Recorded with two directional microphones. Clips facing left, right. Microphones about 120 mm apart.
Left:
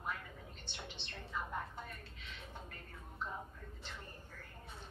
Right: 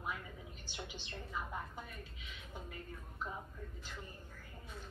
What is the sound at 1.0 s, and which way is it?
Speech, 5° right (ahead or behind).